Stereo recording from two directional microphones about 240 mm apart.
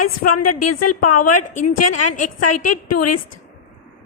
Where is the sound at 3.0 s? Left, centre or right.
Left.